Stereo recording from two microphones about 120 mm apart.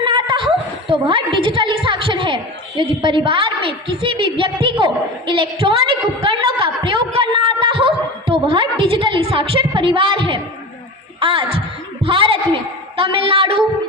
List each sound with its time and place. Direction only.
0.0 s chuckle: 40° right (ahead or behind)
0.9 s a woman's voice: 45° right (ahead or behind)
4.6 s a sound: 45° right (ahead or behind)
11.2 s speech: 50° right (ahead or behind)